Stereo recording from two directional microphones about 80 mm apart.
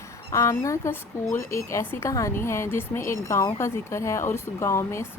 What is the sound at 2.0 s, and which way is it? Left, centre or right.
Speech, left.